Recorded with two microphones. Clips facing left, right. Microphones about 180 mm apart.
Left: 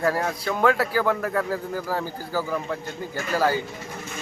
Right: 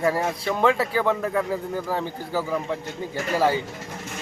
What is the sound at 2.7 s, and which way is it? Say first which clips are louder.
Speech: right 1 dB; 25° right (ahead or behind).